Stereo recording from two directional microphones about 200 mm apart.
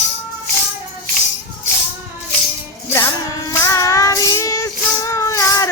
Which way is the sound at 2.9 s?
15° left (ahead or behind).